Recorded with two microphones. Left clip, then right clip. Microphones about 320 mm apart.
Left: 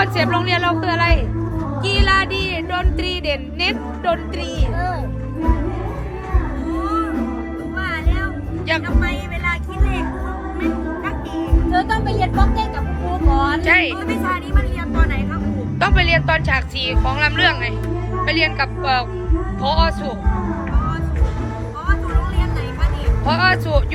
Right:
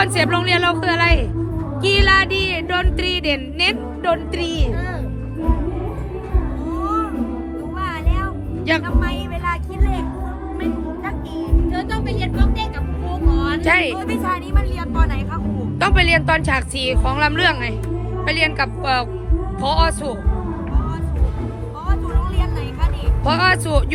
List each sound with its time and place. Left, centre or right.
0.0 s music: right
9.0 s vehicle: right
11.7 s music: centre
13.7 s music: right
15.8 s music: right
23.2 s music: right